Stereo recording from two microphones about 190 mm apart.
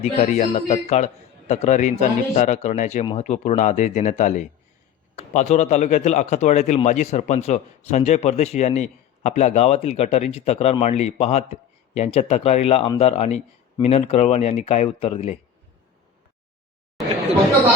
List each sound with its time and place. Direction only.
0.0 s a man's voice: 35° left (ahead or behind)